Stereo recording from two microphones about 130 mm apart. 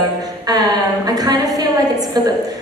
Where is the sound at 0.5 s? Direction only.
30° right (ahead or behind).